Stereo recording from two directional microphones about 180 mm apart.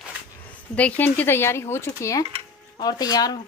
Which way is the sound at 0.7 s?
10° left (ahead or behind).